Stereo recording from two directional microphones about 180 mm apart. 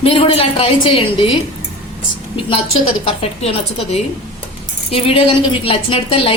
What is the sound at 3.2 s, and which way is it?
A woman's voice, 35° left (ahead or behind).